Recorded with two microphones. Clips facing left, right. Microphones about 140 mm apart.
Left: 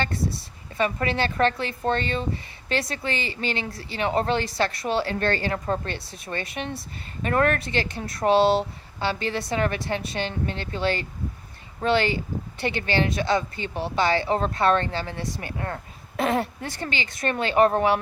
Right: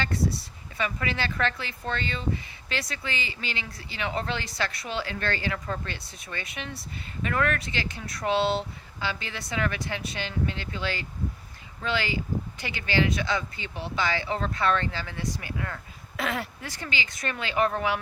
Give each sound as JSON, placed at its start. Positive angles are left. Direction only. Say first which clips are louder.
{"t": 0.1, "sound": "speech", "louder": "right 1 dB", "side_deg": 25}
{"t": 0.8, "sound": "speech", "louder": "left 6 dB", "side_deg": 40}
{"t": 6.7, "sound": "speech", "louder": "left 4 dB", "side_deg": 35}
{"t": 7.6, "sound": "speech", "louder": "left 6 dB", "side_deg": 50}
{"t": 7.9, "sound": "speech", "louder": "left 5 dB", "side_deg": 25}
{"t": 8.2, "sound": "speech", "louder": "left 6 dB", "side_deg": 55}
{"t": 16.2, "sound": "speech", "louder": "left 7 dB", "side_deg": 25}
{"t": 16.8, "sound": "speech", "louder": "left 5 dB", "side_deg": 50}
{"t": 17.7, "sound": "speech", "louder": "left 6 dB", "side_deg": 35}